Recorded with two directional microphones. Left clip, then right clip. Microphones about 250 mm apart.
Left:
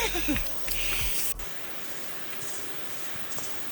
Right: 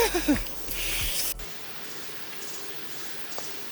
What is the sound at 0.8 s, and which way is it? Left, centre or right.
Music, centre.